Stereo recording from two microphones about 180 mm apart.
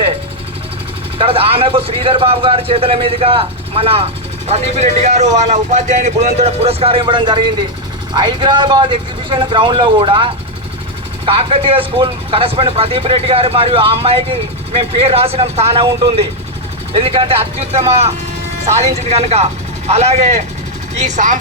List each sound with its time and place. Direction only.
1.2 s speech: 30° right (ahead or behind)